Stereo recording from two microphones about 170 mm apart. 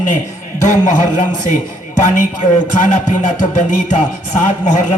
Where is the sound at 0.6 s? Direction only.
45° left (ahead or behind).